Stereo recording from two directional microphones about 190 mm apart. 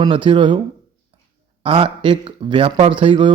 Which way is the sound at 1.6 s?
30° right (ahead or behind).